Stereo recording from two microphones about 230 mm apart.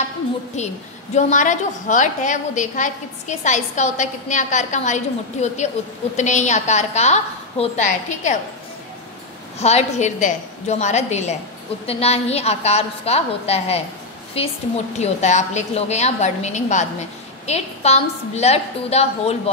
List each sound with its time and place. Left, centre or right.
1.1 s a woman's voice: left
9.6 s a woman's voice: left
15.0 s a woman's voice: left